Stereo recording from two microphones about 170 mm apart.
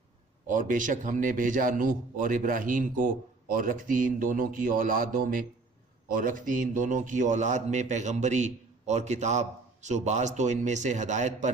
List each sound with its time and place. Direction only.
0.4 s a man's voice: 50° right (ahead or behind)